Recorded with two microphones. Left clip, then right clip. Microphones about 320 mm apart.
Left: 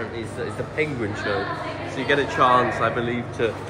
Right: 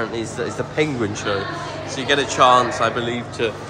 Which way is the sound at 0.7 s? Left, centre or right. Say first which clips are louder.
Right 4 dB; centre.